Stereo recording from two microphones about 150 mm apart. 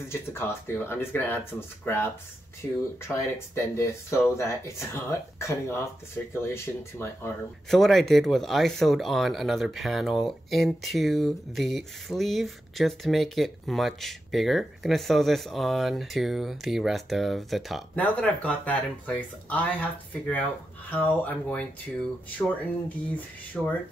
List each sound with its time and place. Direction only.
0.1 s speech: 15° left (ahead or behind)
2.6 s speech: 15° left (ahead or behind)
7.7 s speech: centre (ahead or behind)